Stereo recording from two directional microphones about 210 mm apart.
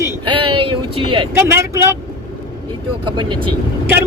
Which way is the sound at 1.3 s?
10° right (ahead or behind).